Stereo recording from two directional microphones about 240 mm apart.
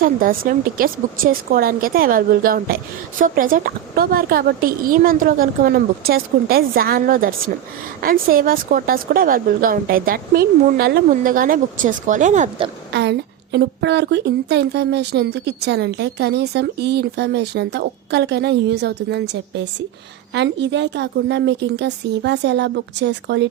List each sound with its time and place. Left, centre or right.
0.0 s speech: right
12.9 s a woman's voice: right